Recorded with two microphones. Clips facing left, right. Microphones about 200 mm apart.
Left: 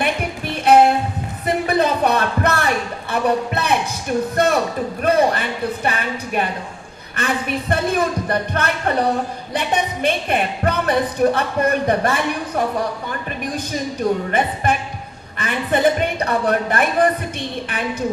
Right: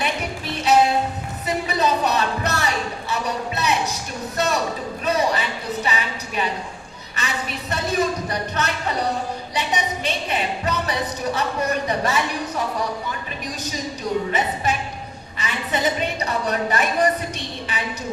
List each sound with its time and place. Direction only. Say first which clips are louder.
0.0 s music: left 4 dB; 55° left (ahead or behind)
4.4 s a sound: left 2 dB; 55° left (ahead or behind)
7.2 s speech: left 7 dB; 55° left (ahead or behind)